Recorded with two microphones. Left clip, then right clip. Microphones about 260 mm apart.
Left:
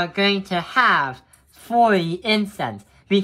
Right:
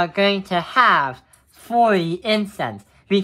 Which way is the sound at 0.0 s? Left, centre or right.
Centre.